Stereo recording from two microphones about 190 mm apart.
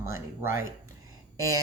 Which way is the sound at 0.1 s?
15° right (ahead or behind).